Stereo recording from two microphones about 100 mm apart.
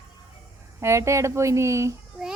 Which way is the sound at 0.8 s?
30° right (ahead or behind).